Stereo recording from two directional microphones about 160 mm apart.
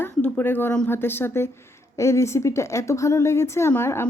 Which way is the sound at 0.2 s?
10° left (ahead or behind).